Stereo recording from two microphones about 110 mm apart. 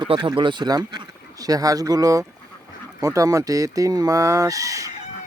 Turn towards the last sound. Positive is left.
turn(degrees=-30)  # may be behind; listen again after turning